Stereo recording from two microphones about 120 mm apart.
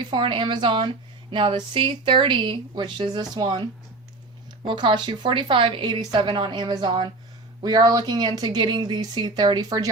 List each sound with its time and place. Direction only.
0.0 s speech: 40° right (ahead or behind)